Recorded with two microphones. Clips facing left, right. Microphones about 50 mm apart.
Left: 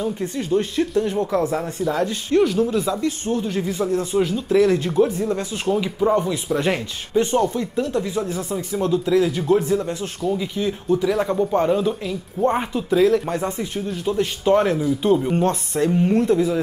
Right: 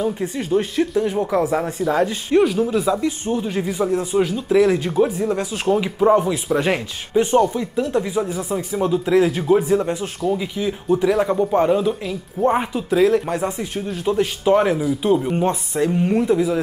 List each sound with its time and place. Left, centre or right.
0.2 s speech: centre
7.4 s speech: centre
7.8 s speech: right
9.7 s speech: right
10.3 s speech: centre
15.4 s speech: centre
15.9 s speech: centre